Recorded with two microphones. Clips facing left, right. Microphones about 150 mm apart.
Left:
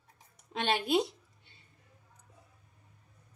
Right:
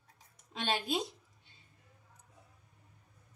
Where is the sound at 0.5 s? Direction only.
65° left (ahead or behind).